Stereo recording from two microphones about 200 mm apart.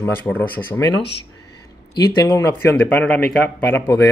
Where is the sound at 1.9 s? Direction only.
15° left (ahead or behind).